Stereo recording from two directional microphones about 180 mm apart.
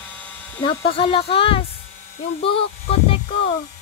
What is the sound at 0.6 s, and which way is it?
Speech, 30° left (ahead or behind).